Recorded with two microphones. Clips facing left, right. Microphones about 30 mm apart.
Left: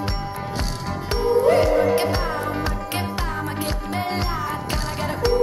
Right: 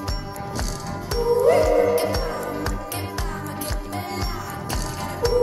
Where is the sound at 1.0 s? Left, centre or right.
Left.